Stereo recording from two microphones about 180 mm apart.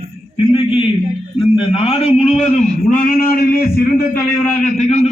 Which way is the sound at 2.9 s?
50° left (ahead or behind).